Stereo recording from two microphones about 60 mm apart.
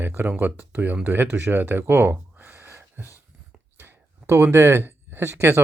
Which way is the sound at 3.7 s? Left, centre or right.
Right.